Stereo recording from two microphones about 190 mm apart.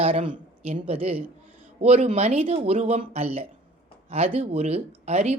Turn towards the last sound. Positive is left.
turn(degrees=-35)  # may be behind; listen again after turning